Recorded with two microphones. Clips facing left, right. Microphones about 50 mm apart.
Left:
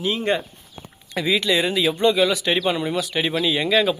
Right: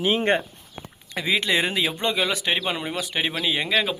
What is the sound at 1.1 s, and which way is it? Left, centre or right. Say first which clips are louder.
Speech: left 3 dB; right.